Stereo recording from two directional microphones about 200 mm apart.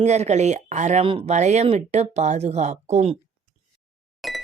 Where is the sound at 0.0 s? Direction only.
35° right (ahead or behind).